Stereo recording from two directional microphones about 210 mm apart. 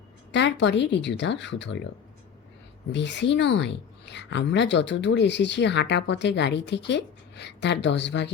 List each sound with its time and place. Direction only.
0.3 s a woman's voice: 55° left (ahead or behind)
2.9 s a woman's voice: 55° left (ahead or behind)